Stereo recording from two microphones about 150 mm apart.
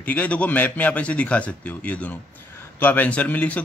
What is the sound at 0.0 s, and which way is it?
A man's voice, 10° left (ahead or behind).